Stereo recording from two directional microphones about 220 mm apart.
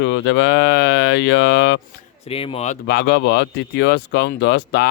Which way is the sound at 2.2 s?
25° left (ahead or behind).